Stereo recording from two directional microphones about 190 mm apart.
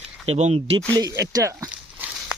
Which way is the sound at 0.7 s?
20° right (ahead or behind).